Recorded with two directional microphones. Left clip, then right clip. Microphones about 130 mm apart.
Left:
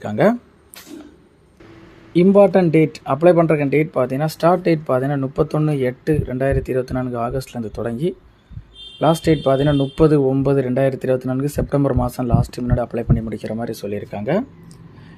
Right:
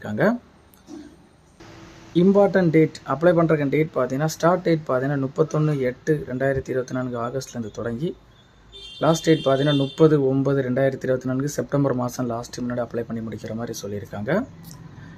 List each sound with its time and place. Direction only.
0.0 s speech: 20° left (ahead or behind)
2.1 s a man's voice: 15° left (ahead or behind)